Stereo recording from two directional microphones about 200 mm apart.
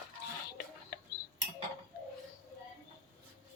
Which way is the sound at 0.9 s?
50° left (ahead or behind).